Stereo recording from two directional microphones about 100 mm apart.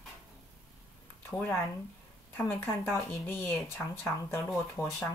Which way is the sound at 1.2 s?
20° left (ahead or behind).